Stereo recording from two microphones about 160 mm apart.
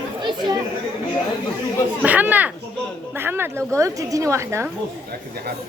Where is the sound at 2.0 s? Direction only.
10° right (ahead or behind).